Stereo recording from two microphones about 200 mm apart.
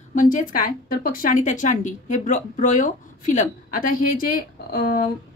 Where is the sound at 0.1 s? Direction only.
40° left (ahead or behind).